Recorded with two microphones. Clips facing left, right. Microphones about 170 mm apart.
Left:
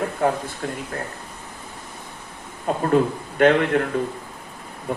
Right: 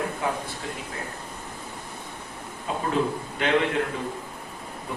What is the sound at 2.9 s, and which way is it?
A man's voice, 55° left (ahead or behind).